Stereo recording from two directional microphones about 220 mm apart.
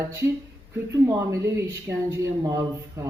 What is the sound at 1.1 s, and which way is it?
Speech, 15° right (ahead or behind).